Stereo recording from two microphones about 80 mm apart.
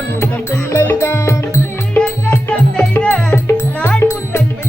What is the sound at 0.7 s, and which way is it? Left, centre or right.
Music, left.